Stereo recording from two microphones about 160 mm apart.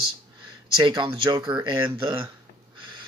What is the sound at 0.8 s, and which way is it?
Speech, 30° right (ahead or behind).